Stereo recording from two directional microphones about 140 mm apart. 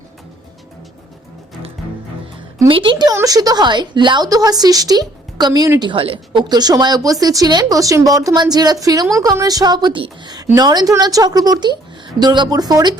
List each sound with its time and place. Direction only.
2.6 s a woman's voice: 35° right (ahead or behind)
5.9 s speech: 40° right (ahead or behind)